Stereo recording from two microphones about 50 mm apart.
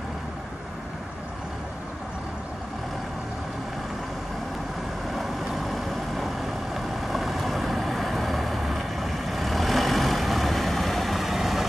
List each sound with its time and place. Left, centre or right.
5.1 s vehicle: centre